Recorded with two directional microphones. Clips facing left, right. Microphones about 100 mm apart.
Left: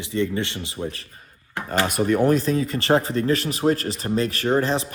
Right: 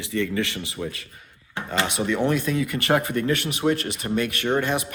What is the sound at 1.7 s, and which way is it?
Speech, 45° left (ahead or behind).